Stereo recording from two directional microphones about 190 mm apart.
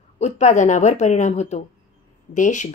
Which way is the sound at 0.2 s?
40° left (ahead or behind).